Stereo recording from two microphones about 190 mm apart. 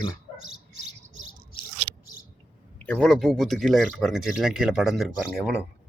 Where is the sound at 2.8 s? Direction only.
5° left (ahead or behind).